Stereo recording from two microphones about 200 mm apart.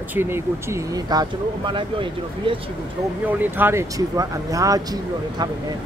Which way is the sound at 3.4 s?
10° right (ahead or behind).